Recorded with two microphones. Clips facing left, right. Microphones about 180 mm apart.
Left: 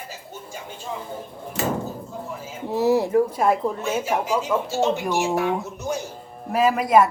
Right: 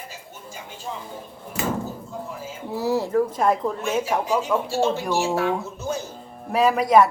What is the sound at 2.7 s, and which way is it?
Speech, 20° left (ahead or behind).